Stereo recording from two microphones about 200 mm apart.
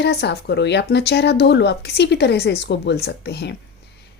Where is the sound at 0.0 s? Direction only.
55° left (ahead or behind).